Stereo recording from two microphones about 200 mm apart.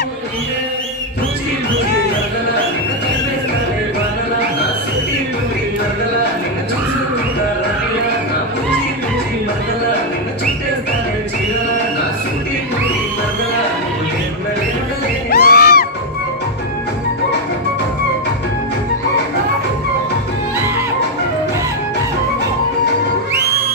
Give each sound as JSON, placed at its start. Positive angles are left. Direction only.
{"t": 15.3, "sound": "music", "side_deg": 50}